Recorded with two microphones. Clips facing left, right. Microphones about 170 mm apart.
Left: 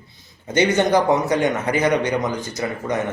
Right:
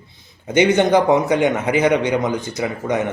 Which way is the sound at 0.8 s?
20° right (ahead or behind).